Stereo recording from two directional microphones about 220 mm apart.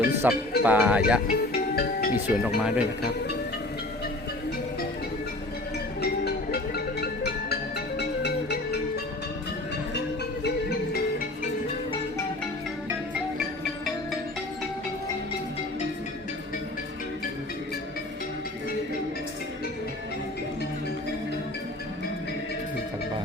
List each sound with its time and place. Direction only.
0.2 s music: 10° right (ahead or behind)
0.6 s speech: 5° right (ahead or behind)
1.3 s music: 40° left (ahead or behind)
2.6 s speech: 5° right (ahead or behind)
6.0 s music: 45° left (ahead or behind)
10.4 s music: 45° left (ahead or behind)